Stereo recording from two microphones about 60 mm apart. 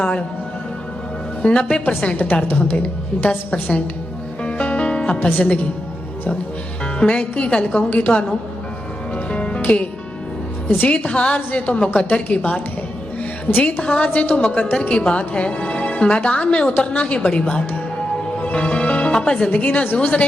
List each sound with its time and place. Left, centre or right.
0.0 s a woman's voice: left
1.4 s a woman's voice: centre
1.8 s a woman's voice: left
4.4 s music: left
5.2 s a woman's voice: left
7.0 s a woman's voice: centre
9.1 s music: centre
10.8 s a woman's voice: left